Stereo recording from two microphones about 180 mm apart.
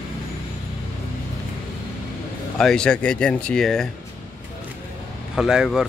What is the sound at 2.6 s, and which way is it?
Speech, 5° left (ahead or behind).